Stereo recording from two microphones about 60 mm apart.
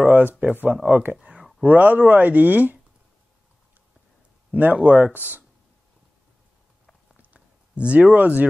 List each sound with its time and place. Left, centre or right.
0.1 s speech: right
1.1 s a sound: centre
1.8 s speech: right
4.5 s speech: right
7.3 s speech: centre